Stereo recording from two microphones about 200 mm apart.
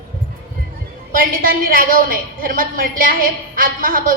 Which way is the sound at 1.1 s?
45° right (ahead or behind).